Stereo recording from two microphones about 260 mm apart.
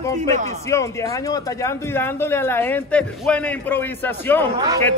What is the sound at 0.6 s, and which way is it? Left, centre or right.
Speech, centre.